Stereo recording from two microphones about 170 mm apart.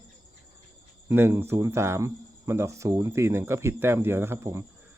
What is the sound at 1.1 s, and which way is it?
Speech, 15° right (ahead or behind).